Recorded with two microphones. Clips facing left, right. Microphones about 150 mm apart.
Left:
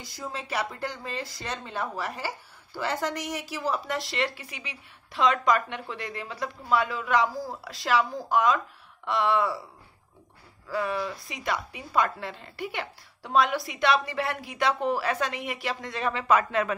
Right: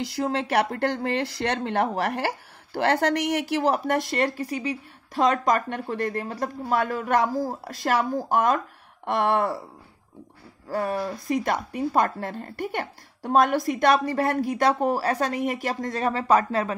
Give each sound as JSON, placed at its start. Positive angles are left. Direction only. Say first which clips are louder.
{"t": 0.0, "sound": "speech", "louder": "right 11 dB", "side_deg": -75}
{"t": 10.7, "sound": "speech", "louder": "right 3 dB", "side_deg": -45}